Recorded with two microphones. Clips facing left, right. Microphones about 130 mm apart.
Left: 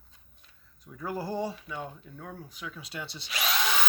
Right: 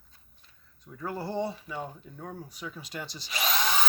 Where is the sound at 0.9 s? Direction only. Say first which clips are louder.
Right 1 dB; centre (ahead or behind).